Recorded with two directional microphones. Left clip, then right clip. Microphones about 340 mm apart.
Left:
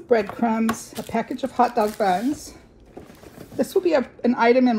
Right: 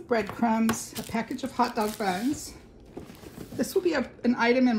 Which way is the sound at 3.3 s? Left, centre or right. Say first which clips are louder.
Left 7 dB; centre.